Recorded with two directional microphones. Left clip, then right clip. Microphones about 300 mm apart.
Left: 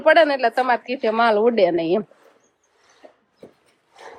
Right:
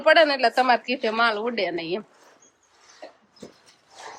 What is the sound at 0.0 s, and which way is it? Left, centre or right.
A woman's voice, centre.